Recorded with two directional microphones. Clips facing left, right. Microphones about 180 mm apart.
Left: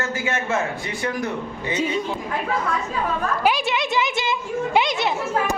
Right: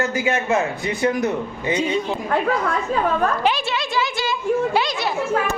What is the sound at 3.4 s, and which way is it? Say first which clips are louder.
A woman's voice: left 1 dB; 15° left (ahead or behind).